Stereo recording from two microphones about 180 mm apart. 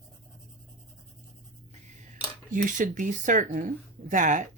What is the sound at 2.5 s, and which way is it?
Speech, 45° right (ahead or behind).